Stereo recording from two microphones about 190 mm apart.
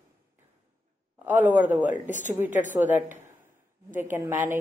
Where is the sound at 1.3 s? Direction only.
10° right (ahead or behind).